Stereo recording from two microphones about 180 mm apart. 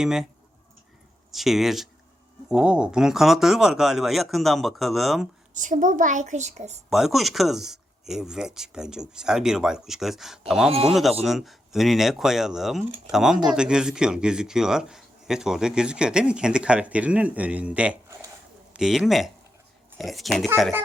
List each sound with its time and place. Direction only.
0.0 s speech: 5° right (ahead or behind)
1.3 s speech: centre (ahead or behind)
5.5 s a woman's voice: 45° right (ahead or behind)
6.9 s speech: centre (ahead or behind)
10.7 s a man's voice: 35° right (ahead or behind)
11.2 s speech: centre (ahead or behind)